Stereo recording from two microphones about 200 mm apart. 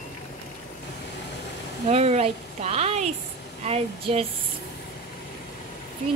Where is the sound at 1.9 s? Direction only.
30° right (ahead or behind).